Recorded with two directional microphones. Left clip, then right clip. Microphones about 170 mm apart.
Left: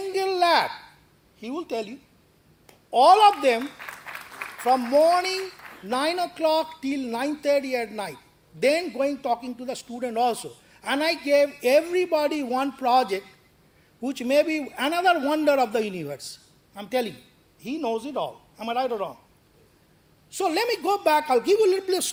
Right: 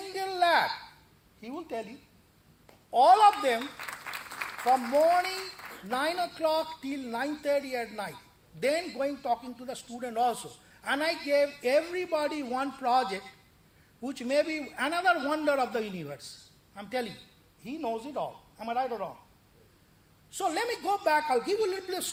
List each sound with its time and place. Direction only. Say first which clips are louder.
0.1 s a sound: left 5 dB; 55° left (ahead or behind)
1.4 s speech: left 7 dB; 55° left (ahead or behind)
2.9 s speech: left 4 dB; 55° left (ahead or behind)
4.6 s speech: left 5 dB; 55° left (ahead or behind)
20.3 s speech: left 6 dB; 55° left (ahead or behind)